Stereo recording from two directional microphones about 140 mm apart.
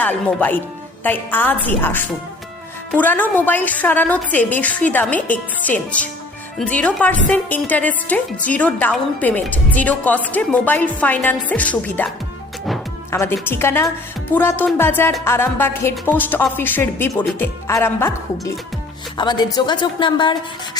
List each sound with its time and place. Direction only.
0.0 s a woman's voice: 10° left (ahead or behind)
13.1 s a woman's voice: 15° left (ahead or behind)
19.1 s a woman's voice: 30° left (ahead or behind)